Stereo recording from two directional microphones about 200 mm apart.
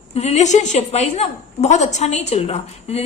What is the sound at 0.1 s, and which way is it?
A woman's voice, 30° left (ahead or behind).